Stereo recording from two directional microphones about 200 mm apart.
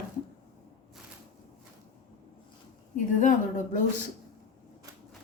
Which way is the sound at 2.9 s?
40° left (ahead or behind).